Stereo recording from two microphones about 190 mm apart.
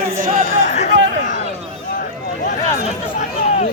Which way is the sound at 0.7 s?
40° left (ahead or behind).